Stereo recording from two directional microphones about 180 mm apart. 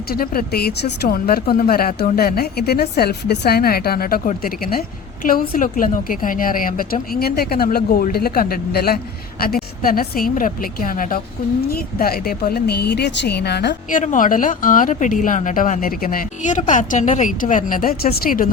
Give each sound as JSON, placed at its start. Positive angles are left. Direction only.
{"t": 0.1, "sound": "a woman's voice", "side_deg": 55}
{"t": 13.9, "sound": "a woman's voice", "side_deg": 45}